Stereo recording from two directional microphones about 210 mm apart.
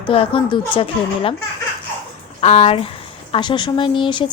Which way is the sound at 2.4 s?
30° left (ahead or behind).